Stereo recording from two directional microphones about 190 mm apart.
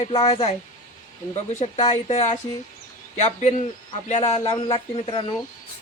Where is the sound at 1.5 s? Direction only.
35° left (ahead or behind).